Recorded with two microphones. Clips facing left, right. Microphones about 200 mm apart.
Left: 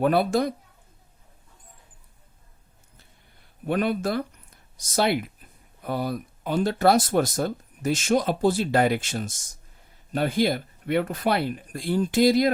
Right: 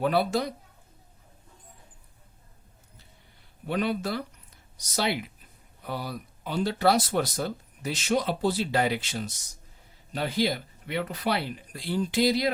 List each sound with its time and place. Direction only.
0.0 s speech: 50° left (ahead or behind)
3.7 s speech: 50° left (ahead or behind)